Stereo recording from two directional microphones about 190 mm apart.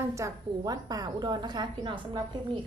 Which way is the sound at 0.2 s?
20° right (ahead or behind).